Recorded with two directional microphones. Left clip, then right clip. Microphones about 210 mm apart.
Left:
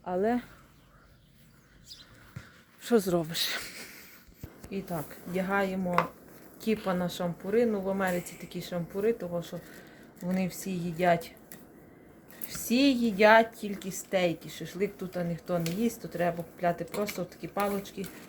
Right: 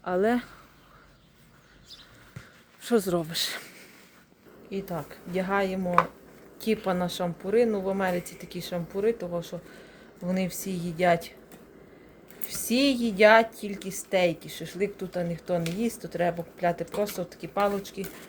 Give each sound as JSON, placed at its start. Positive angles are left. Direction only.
{"t": 0.0, "sound": "speech", "side_deg": -25}
{"t": 2.8, "sound": "speech", "side_deg": 0}
{"t": 4.7, "sound": "a woman's voice", "side_deg": -15}
{"t": 12.5, "sound": "a woman's voice", "side_deg": -15}